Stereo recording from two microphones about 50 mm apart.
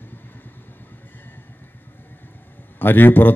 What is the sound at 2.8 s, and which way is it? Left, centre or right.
Speech, left.